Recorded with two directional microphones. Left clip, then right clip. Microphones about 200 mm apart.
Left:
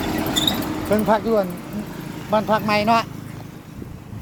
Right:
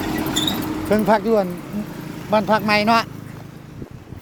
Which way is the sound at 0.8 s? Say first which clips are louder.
Right 2 dB; 30° right (ahead or behind).